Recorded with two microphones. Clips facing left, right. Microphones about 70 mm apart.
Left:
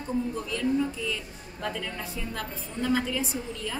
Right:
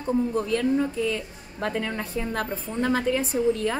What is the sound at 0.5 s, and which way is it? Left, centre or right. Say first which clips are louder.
A woman's voice: right 4 dB; right.